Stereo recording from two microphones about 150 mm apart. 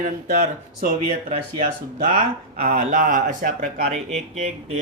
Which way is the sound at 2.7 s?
50° right (ahead or behind).